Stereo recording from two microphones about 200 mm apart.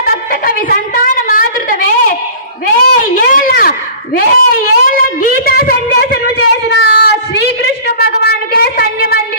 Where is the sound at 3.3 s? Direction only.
45° left (ahead or behind).